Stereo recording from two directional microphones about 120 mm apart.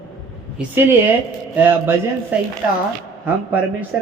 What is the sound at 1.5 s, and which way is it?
Speech, 15° right (ahead or behind).